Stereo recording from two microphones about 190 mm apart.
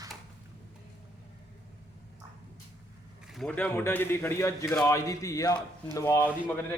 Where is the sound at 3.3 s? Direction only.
5° left (ahead or behind).